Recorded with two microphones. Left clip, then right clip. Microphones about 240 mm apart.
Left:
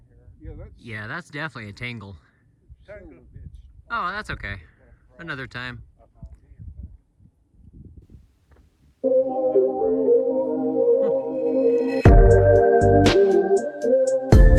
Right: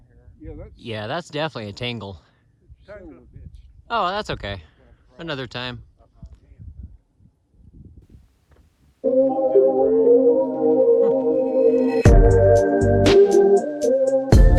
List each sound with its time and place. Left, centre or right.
0.4 s speech: right
0.9 s speech: centre
3.8 s speech: centre
8.5 s music: centre